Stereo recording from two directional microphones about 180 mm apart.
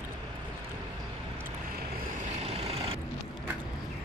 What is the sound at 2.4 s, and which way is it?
Vehicle, 35° right (ahead or behind).